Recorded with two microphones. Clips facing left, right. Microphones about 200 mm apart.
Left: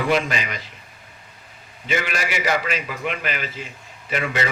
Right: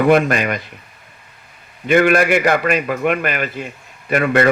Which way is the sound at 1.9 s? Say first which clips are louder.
Right 12 dB; 55° right (ahead or behind).